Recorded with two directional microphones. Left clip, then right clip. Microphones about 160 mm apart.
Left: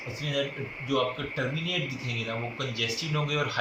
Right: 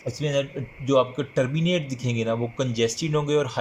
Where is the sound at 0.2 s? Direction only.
60° right (ahead or behind).